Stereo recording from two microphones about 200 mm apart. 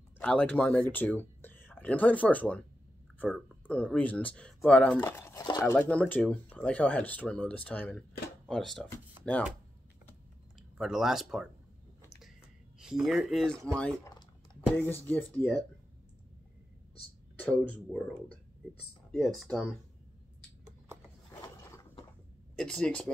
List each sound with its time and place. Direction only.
0.2 s speech: 5° left (ahead or behind)
3.6 s speech: 5° left (ahead or behind)
10.8 s speech: centre (ahead or behind)
12.2 s a sound: 5° right (ahead or behind)
14.0 s speech: 15° left (ahead or behind)
17.5 s speech: 5° left (ahead or behind)
19.1 s speech: centre (ahead or behind)
21.3 s mechanisms: 15° left (ahead or behind)
22.6 s speech: 5° left (ahead or behind)